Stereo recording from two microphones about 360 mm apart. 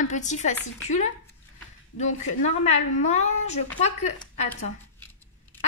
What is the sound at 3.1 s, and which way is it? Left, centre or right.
Speech, centre.